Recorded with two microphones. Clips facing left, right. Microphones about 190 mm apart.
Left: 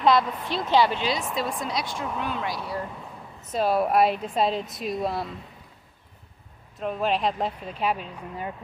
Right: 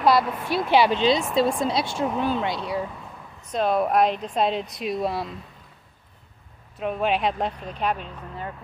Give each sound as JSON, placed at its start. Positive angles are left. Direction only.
{"t": 0.0, "sound": "a woman's voice", "side_deg": -5}
{"t": 3.5, "sound": "speech", "side_deg": 5}
{"t": 6.8, "sound": "speech", "side_deg": 0}